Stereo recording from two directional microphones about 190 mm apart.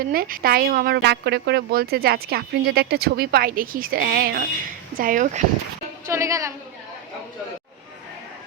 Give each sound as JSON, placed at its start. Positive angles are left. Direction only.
{"t": 0.1, "sound": "speech", "side_deg": -50}
{"t": 6.1, "sound": "a woman's voice", "side_deg": -15}